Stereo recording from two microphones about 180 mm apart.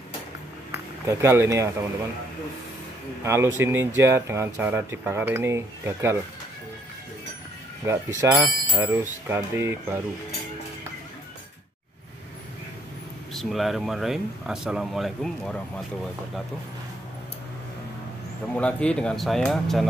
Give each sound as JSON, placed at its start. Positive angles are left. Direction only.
{"t": 1.0, "sound": "speech", "side_deg": -15}
{"t": 3.3, "sound": "speech", "side_deg": -15}
{"t": 7.8, "sound": "speech", "side_deg": -15}
{"t": 13.3, "sound": "speech", "side_deg": 0}
{"t": 18.5, "sound": "speech", "side_deg": 5}